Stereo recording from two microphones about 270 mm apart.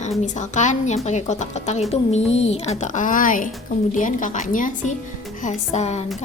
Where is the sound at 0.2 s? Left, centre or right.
Left.